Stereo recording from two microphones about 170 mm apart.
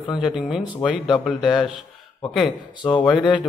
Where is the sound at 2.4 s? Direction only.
30° left (ahead or behind).